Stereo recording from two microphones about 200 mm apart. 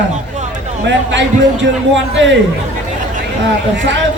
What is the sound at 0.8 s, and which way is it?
A man's voice, 60° right (ahead or behind).